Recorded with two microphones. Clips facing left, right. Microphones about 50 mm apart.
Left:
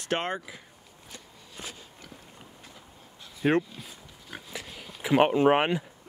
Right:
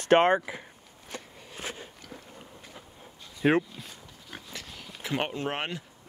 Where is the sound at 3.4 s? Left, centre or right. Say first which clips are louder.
Right 1 dB; centre; by 5.8 s left.